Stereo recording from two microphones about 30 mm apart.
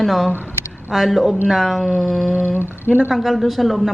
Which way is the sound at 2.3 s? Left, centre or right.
Right.